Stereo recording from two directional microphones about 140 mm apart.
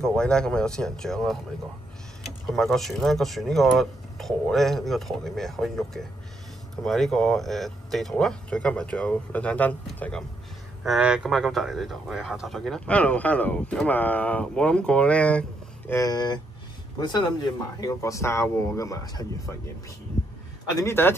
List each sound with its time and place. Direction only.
0.0 s speech: 5° left (ahead or behind)
10.8 s speech: 5° right (ahead or behind)
15.9 s speech: 25° left (ahead or behind)
20.7 s speech: 15° left (ahead or behind)